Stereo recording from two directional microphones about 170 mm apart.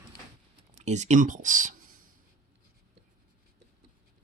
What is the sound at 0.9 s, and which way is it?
Speech, 45° right (ahead or behind).